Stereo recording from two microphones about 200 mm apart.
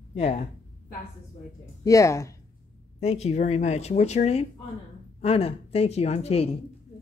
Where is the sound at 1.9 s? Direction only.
15° left (ahead or behind).